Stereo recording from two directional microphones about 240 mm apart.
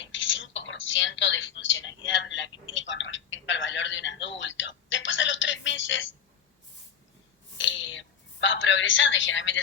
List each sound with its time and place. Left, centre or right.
0.1 s whispering: left
2.0 s telephone: left
7.6 s a sound: left